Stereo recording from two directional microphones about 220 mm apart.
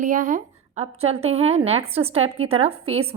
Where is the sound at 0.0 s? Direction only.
35° right (ahead or behind).